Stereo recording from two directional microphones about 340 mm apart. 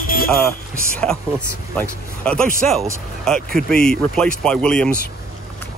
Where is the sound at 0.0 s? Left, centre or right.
Left.